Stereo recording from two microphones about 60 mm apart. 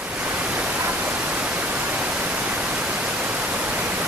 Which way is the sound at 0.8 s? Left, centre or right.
Right.